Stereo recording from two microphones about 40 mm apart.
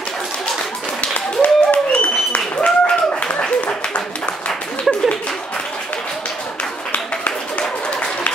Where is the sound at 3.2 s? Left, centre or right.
Left.